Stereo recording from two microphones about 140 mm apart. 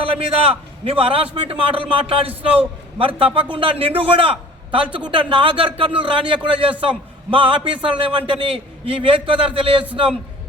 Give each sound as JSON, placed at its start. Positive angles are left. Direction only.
{"t": 0.0, "sound": "a man's voice", "side_deg": -40}